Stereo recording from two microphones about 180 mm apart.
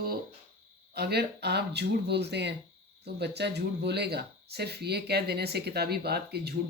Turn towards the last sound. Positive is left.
turn(degrees=-60)  # may be behind; listen again after turning